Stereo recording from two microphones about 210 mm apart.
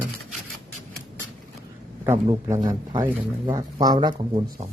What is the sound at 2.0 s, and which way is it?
A man's voice, 15° right (ahead or behind).